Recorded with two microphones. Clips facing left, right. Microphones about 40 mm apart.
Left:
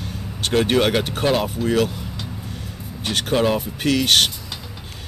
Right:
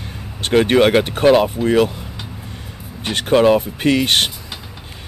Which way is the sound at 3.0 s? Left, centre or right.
Centre.